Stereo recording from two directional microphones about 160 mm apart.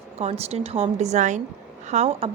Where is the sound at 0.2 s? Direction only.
40° right (ahead or behind).